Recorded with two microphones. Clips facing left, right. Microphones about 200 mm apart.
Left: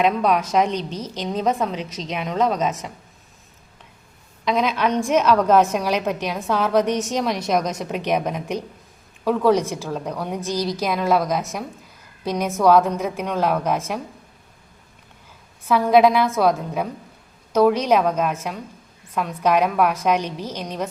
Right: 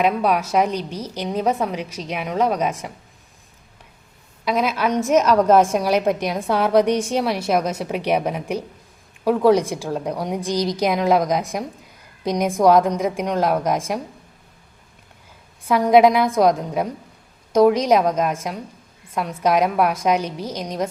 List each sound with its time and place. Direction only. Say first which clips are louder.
0.0 s a woman's voice: even; 10° right (ahead or behind)
4.4 s a woman's voice: even; 5° right (ahead or behind)
15.6 s a woman's voice: right 2 dB; 15° right (ahead or behind)